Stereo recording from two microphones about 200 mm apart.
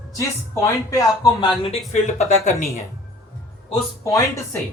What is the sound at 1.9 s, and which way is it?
Speech, 35° left (ahead or behind).